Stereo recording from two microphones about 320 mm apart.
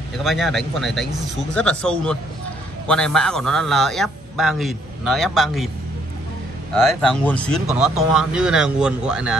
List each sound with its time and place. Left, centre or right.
0.2 s a man's voice: centre
6.7 s a man's voice: centre